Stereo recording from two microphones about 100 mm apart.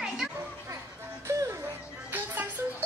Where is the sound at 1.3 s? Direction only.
30° right (ahead or behind).